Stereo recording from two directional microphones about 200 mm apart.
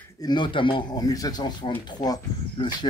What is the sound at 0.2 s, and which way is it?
Speech, 20° left (ahead or behind).